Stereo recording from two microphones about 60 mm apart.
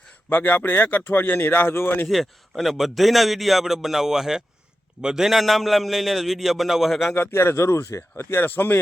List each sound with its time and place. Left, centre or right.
0.3 s speech: left
2.0 s a man's voice: centre
7.1 s speech: left